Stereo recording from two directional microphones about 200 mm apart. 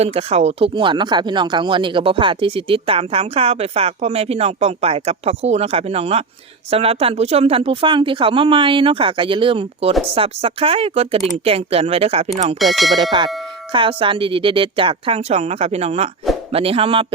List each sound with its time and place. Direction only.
0.0 s speech: 30° right (ahead or behind)
12.5 s speech: centre (ahead or behind)
13.0 s speech: 25° right (ahead or behind)